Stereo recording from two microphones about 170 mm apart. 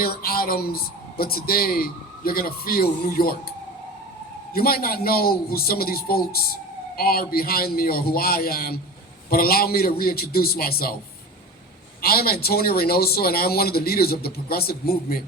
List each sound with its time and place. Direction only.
0.0 s a man's voice: 60° left (ahead or behind)
4.5 s a man's voice: 60° left (ahead or behind)
12.0 s a man's voice: 65° left (ahead or behind)